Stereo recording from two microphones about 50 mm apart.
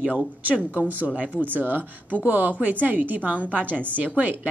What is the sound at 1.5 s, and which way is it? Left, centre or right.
A woman's voice, right.